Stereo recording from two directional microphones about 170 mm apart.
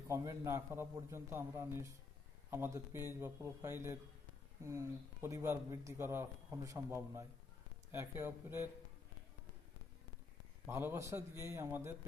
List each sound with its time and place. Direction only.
0.1 s a man's voice: 15° right (ahead or behind)
10.7 s a man's voice: 15° right (ahead or behind)